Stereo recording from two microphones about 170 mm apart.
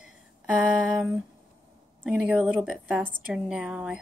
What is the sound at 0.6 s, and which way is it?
A woman's voice, 10° right (ahead or behind).